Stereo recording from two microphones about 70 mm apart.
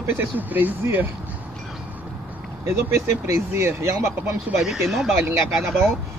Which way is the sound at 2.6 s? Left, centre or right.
Right.